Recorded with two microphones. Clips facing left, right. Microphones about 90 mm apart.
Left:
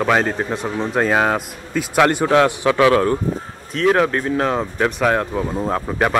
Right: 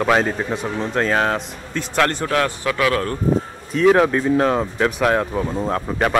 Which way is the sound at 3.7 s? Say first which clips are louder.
Right 2 dB; 5° right (ahead or behind).